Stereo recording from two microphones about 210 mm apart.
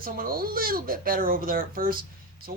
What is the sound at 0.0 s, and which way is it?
Speech, 45° right (ahead or behind).